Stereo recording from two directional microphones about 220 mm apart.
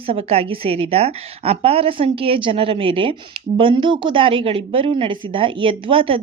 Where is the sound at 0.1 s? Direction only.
25° right (ahead or behind).